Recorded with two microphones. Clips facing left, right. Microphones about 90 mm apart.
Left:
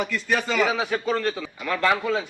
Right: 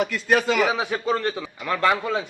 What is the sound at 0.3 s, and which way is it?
Speech, 60° right (ahead or behind).